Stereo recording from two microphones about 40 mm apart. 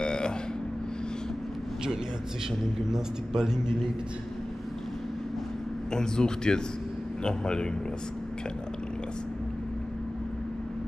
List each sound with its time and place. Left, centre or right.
0.0 s a sound: left
2.9 s a man's voice: centre
5.9 s a man's voice: centre